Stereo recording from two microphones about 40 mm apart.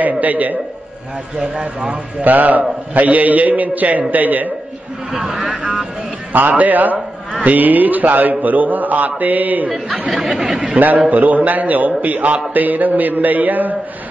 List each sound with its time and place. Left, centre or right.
0.2 s a man's voice: right
1.4 s speech: right
2.2 s a man's voice: right
5.3 s speech: centre
6.3 s a man's voice: right
10.1 s a sound: centre
11.1 s a man's voice: right